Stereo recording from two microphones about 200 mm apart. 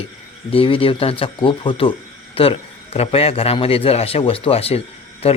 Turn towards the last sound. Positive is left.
turn(degrees=30)  # may be behind; listen again after turning